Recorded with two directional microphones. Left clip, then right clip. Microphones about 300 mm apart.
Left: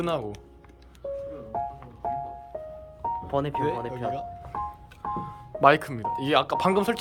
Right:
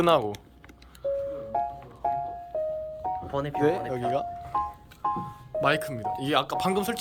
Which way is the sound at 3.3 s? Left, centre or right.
Left.